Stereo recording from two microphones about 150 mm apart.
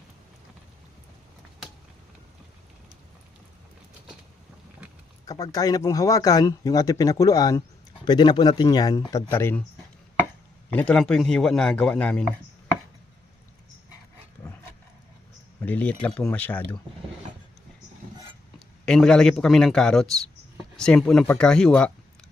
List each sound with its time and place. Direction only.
5.2 s speech: 25° left (ahead or behind)
10.7 s a man's voice: 10° left (ahead or behind)
15.6 s speech: 10° left (ahead or behind)
18.9 s a man's voice: 5° left (ahead or behind)